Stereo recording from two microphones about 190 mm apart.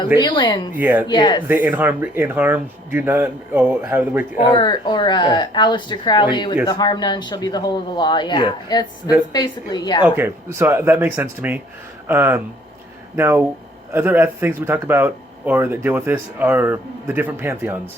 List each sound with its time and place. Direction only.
0.2 s speech: 25° left (ahead or behind)
0.7 s speech: 10° right (ahead or behind)
1.0 s speech: 25° left (ahead or behind)
1.5 s speech: 10° right (ahead or behind)
4.5 s speech: 25° left (ahead or behind)
10.0 s speech: 10° right (ahead or behind)